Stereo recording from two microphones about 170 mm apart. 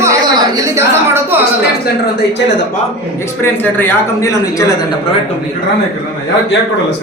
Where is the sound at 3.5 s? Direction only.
15° left (ahead or behind).